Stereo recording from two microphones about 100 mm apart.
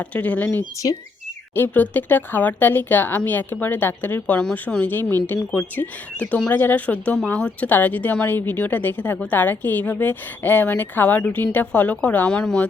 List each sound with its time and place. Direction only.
0.0 s a woman's voice: 15° left (ahead or behind)
0.6 s speech: 35° left (ahead or behind)
1.5 s a woman's voice: 20° left (ahead or behind)